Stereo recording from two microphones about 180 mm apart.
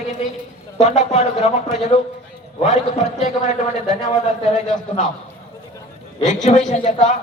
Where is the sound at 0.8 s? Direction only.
35° left (ahead or behind).